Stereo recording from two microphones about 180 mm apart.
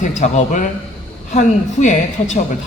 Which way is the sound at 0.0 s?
45° left (ahead or behind).